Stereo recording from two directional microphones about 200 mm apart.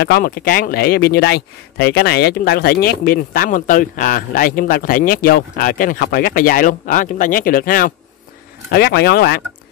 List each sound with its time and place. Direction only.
0.0 s speech: 50° left (ahead or behind)